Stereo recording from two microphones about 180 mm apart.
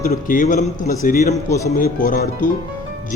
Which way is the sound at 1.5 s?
15° left (ahead or behind).